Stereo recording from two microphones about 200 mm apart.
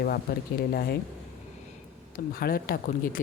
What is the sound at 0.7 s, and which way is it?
Speech, 50° left (ahead or behind).